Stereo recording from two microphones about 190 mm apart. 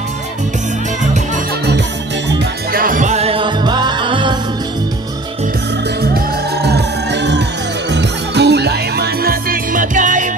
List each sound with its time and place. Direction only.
2.2 s music: 60° right (ahead or behind); by 4.4 s 25° right (ahead or behind)
6.1 s music: 60° right (ahead or behind); by 10.3 s 40° right (ahead or behind)